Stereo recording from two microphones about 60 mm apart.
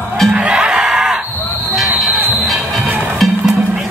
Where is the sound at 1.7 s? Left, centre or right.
Centre.